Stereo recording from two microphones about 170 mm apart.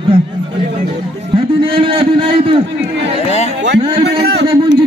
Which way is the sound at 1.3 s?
30° right (ahead or behind).